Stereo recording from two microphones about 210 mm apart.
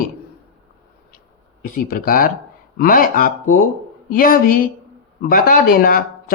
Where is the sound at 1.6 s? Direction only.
40° left (ahead or behind).